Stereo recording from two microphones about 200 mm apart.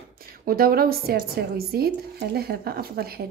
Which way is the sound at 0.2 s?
50° right (ahead or behind).